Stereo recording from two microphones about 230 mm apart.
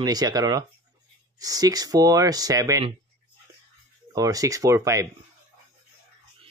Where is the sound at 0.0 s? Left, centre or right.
Centre.